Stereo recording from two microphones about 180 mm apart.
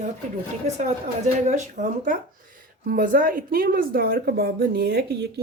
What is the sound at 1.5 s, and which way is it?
Speech, 45° right (ahead or behind).